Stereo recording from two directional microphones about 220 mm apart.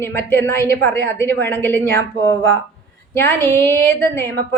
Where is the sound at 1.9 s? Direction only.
60° right (ahead or behind).